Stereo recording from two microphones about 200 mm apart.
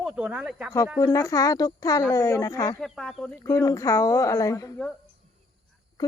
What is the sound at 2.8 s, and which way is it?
Speech, centre (ahead or behind).